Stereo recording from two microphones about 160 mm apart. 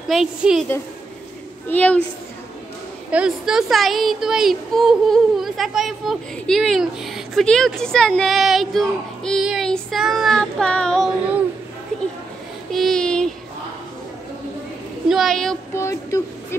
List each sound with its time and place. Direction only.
0.1 s speech: 5° right (ahead or behind)
1.7 s a sound: 10° left (ahead or behind)
3.1 s speech: 5° right (ahead or behind)
12.7 s child singing: centre (ahead or behind)
15.0 s speech: centre (ahead or behind)
15.7 s a sound: 20° left (ahead or behind)